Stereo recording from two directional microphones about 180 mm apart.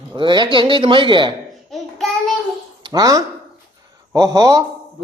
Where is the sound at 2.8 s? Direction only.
20° right (ahead or behind).